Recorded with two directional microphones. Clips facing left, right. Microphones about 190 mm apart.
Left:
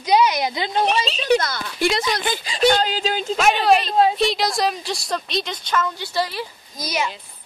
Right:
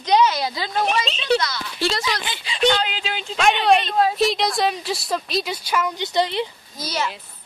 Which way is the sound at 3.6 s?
Centre (ahead or behind).